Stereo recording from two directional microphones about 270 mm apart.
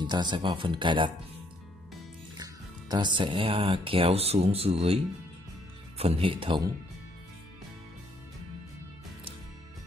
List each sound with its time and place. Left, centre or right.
0.0 s speech: centre
2.3 s speech: centre